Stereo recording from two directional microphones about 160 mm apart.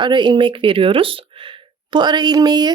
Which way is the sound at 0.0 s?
30° right (ahead or behind).